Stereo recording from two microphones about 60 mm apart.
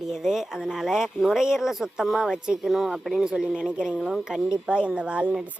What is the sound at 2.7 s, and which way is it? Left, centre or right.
Speech, centre.